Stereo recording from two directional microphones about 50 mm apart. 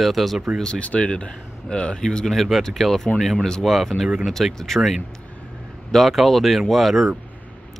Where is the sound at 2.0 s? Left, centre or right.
Centre.